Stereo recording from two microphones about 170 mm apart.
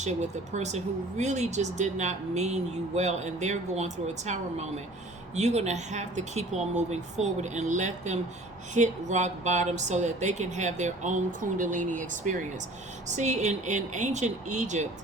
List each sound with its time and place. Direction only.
0.0 s speech: 40° right (ahead or behind)